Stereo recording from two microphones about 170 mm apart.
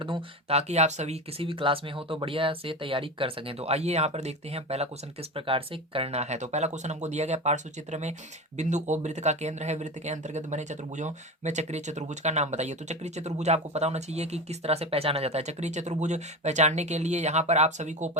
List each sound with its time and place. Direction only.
0.0 s speech: 35° right (ahead or behind)